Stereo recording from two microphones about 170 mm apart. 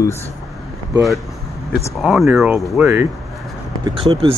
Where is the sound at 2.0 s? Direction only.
5° right (ahead or behind).